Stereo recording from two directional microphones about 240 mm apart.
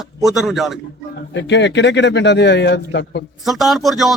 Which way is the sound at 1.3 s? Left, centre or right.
Left.